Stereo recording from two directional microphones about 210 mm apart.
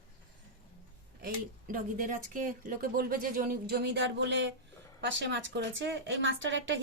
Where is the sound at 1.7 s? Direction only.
40° right (ahead or behind).